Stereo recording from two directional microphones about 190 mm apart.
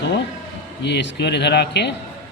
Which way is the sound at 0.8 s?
65° left (ahead or behind).